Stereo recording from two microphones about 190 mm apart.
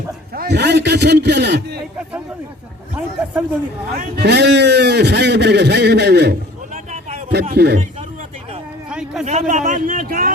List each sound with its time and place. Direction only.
0.3 s a man's voice: 60° right (ahead or behind)
2.9 s speech: 5° right (ahead or behind)
3.9 s a man's voice: 60° right (ahead or behind)
6.7 s a sound: 35° right (ahead or behind)
7.3 s a man's voice: 60° right (ahead or behind)
8.9 s a sound: 5° right (ahead or behind)
9.2 s a man's voice: 40° right (ahead or behind)